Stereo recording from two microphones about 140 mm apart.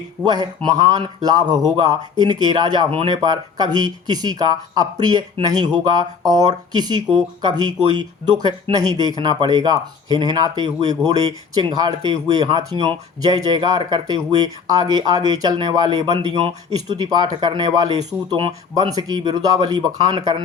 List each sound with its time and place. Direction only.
0.3 s speech: 30° right (ahead or behind)